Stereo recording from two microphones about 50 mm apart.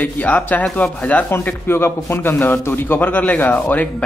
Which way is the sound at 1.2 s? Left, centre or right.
Left.